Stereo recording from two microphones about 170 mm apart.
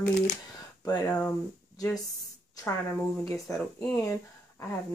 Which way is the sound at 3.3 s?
15° left (ahead or behind).